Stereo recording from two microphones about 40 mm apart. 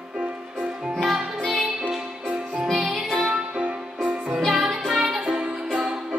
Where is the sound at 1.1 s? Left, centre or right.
Centre.